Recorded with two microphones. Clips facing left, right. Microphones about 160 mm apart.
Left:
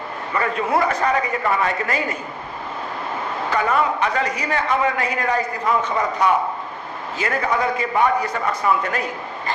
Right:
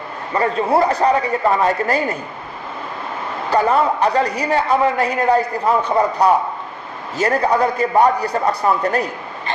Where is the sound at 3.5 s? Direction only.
35° right (ahead or behind).